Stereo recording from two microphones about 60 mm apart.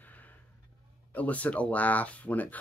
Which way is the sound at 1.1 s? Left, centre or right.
Left.